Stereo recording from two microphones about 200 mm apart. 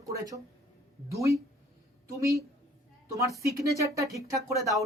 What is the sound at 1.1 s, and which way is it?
Speech, 15° right (ahead or behind).